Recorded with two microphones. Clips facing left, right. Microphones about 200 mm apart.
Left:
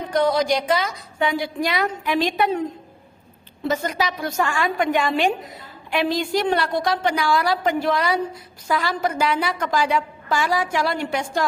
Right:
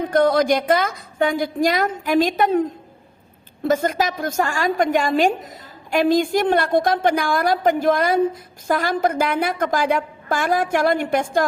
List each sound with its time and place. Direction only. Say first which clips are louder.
0.0 s a woman's voice: right 3 dB; 55° right (ahead or behind)